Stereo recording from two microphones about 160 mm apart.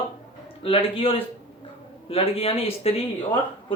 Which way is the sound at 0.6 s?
35° left (ahead or behind).